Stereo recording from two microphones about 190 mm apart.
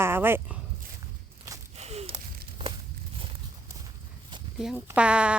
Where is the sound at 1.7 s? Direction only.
35° right (ahead or behind).